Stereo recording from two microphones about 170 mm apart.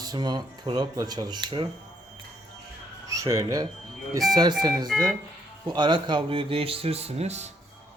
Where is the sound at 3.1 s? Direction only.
20° right (ahead or behind); by 7.5 s 40° right (ahead or behind).